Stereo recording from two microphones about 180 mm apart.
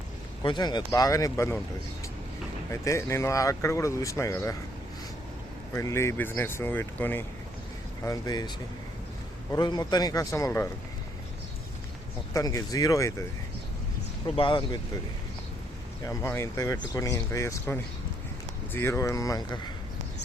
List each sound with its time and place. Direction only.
0.4 s speech: 25° left (ahead or behind)
2.8 s speech: 15° left (ahead or behind)
5.7 s speech: 15° left (ahead or behind)
12.3 s speech: 20° left (ahead or behind)
14.3 s speech: 25° left (ahead or behind)
16.0 s speech: 15° left (ahead or behind)